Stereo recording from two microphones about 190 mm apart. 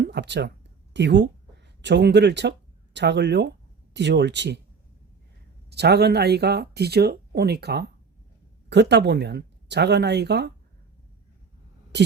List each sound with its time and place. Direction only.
0.0 s speech: 65° right (ahead or behind)
5.7 s speech: 60° right (ahead or behind)